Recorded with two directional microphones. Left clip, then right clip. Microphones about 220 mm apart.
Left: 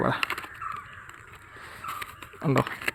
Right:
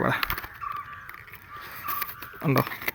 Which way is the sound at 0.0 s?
Centre (ahead or behind).